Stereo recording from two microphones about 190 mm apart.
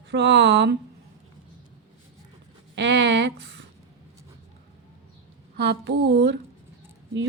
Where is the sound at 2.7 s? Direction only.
65° right (ahead or behind).